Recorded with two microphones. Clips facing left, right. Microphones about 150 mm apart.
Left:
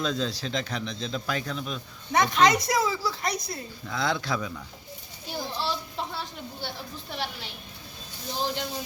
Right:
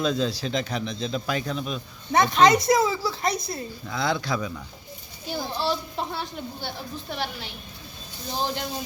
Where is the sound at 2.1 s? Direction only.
30° right (ahead or behind).